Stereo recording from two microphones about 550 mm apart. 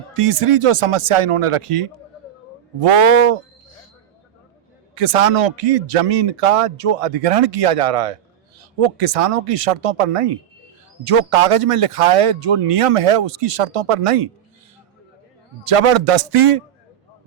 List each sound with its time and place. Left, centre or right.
0.0 s speech: right
4.9 s a man's voice: right
15.6 s speech: right